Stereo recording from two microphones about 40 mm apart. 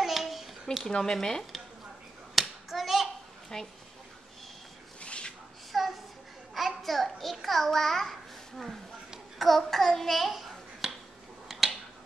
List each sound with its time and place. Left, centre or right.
0.0 s a sound: centre
0.8 s speech: centre
2.3 s clapping: centre
3.5 s speech: centre
5.0 s rub: left
5.7 s a sound: centre
6.5 s a child's voice: centre
11.4 s finger snapping: centre